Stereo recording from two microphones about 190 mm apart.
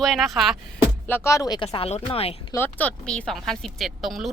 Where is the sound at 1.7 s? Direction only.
35° left (ahead or behind).